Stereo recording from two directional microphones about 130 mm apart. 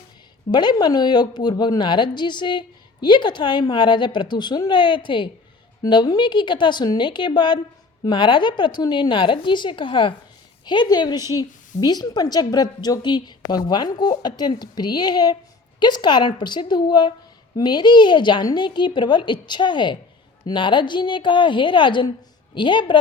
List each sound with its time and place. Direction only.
0.5 s a woman's voice: 35° left (ahead or behind)